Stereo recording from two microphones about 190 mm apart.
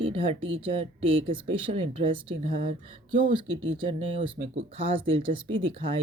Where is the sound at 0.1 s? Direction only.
30° right (ahead or behind).